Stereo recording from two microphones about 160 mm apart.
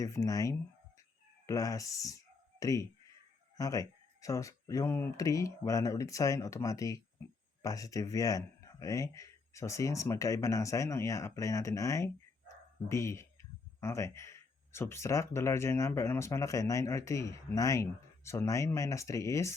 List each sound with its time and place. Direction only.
0.0 s speech: 20° left (ahead or behind)